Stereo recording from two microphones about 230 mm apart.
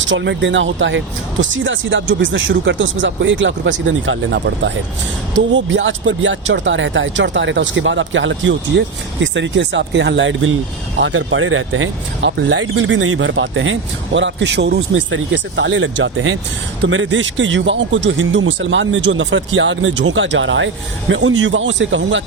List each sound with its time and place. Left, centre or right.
0.1 s speech: right